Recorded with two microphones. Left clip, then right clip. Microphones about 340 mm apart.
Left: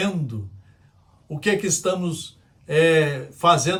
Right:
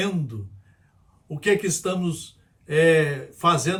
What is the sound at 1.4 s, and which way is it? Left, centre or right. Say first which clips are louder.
Speech: even; centre.